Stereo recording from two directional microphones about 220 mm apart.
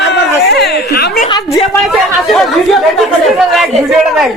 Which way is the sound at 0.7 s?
45° left (ahead or behind).